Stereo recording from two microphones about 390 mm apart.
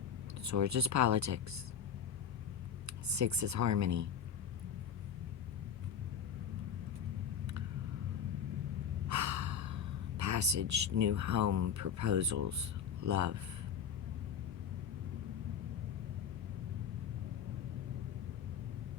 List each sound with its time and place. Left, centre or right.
0.4 s speech: right
2.8 s speech: right
9.0 s speech: right